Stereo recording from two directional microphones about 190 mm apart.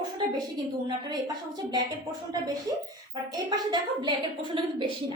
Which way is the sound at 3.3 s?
25° right (ahead or behind).